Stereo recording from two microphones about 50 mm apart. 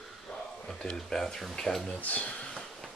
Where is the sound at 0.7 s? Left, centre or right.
Centre.